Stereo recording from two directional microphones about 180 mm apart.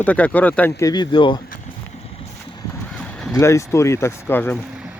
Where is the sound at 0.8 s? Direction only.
25° left (ahead or behind).